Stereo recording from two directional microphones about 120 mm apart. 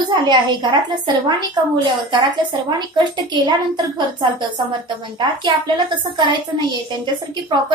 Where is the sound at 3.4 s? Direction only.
40° right (ahead or behind).